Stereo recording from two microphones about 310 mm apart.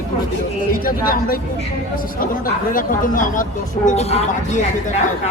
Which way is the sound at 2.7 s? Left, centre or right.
Left.